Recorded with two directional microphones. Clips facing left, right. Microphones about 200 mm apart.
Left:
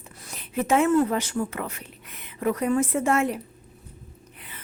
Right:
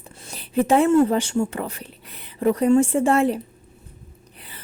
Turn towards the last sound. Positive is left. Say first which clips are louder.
# right 5 dB
turn(degrees=-30)  # may be behind; listen again after turning